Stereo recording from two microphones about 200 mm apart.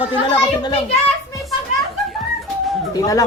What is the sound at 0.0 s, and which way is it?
Speech, 25° left (ahead or behind).